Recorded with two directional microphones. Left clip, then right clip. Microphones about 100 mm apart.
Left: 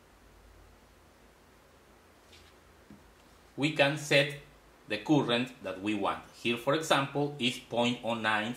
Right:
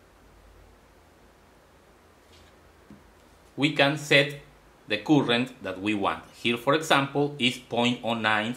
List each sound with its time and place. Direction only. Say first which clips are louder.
3.5 s speech: right 5 dB; 35° right (ahead or behind)